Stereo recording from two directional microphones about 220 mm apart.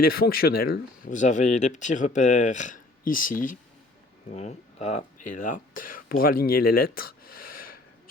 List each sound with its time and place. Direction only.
0.0 s speech: 45° left (ahead or behind)